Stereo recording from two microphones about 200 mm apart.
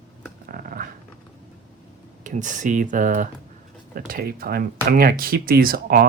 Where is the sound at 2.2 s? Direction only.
40° right (ahead or behind).